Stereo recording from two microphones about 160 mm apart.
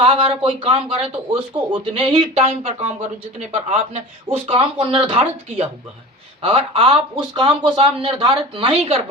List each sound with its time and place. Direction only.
0.0 s speech: 35° right (ahead or behind)